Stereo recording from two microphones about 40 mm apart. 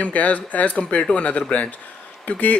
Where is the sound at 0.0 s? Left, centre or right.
Left.